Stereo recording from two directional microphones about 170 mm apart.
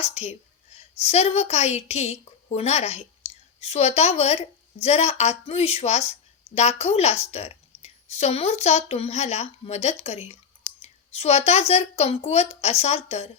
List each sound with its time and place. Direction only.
0.0 s a woman's voice: 40° left (ahead or behind)